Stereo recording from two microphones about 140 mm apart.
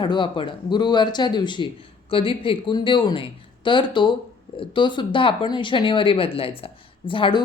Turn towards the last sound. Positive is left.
turn(degrees=35)  # may be behind; listen again after turning